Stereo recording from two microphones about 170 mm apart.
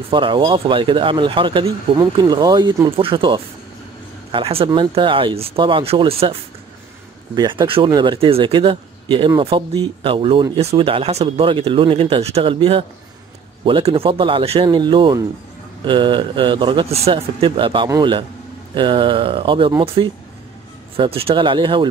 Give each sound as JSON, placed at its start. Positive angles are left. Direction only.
{"t": 0.1, "sound": "speech", "side_deg": -30}
{"t": 7.3, "sound": "speech", "side_deg": -30}